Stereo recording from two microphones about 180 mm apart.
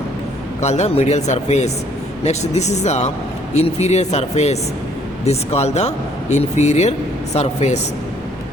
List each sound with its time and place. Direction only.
0.6 s speech: 40° left (ahead or behind)